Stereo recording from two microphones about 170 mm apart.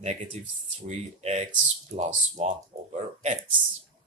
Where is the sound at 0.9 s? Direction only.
40° right (ahead or behind).